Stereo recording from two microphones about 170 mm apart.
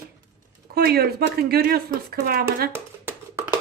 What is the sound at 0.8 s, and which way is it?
Speech, 65° right (ahead or behind).